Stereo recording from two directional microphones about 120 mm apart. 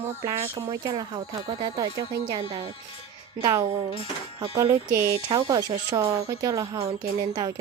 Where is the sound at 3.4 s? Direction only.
35° right (ahead or behind).